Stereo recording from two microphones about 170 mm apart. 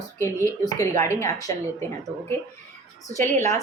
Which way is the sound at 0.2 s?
20° left (ahead or behind).